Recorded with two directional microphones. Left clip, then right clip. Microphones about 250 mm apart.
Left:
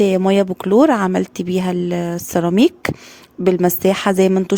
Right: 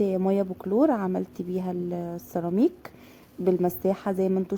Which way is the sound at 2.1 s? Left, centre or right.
Left.